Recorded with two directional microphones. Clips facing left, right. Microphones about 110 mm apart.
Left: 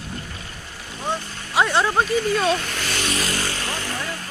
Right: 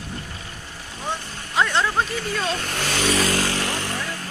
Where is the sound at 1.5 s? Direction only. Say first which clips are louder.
Left 2 dB; 15° left (ahead or behind).